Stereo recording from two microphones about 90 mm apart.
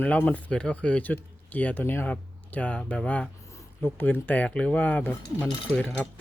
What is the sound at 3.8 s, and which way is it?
Speech, 25° left (ahead or behind).